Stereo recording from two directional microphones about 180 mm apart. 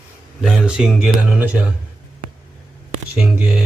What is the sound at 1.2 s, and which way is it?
Speech, 10° right (ahead or behind).